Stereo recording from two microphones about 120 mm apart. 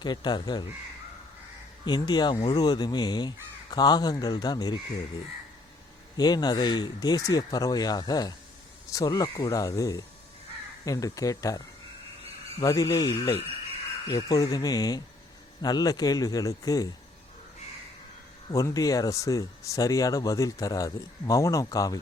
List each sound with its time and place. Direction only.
0.0 s speech: 40° left (ahead or behind)
1.8 s speech: 35° left (ahead or behind)
6.1 s speech: 35° left (ahead or behind)
12.6 s speech: 30° left (ahead or behind)
18.5 s speech: 30° left (ahead or behind)